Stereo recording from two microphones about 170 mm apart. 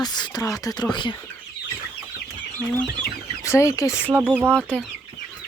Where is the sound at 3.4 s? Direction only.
15° left (ahead or behind).